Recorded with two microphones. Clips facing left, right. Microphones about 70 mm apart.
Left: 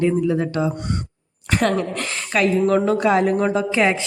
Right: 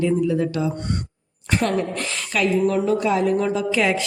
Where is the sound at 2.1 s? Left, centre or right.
Left.